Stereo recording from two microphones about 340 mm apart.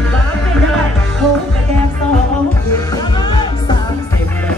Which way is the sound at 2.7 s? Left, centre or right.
Centre.